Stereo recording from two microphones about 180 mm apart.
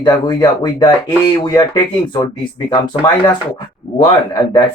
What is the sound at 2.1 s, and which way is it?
Speech, 25° left (ahead or behind).